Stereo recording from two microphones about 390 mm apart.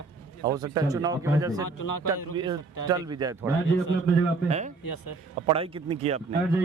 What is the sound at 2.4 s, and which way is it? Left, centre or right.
Speech, centre.